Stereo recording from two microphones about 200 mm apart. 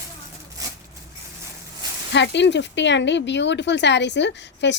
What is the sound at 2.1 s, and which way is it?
Speech, 60° left (ahead or behind).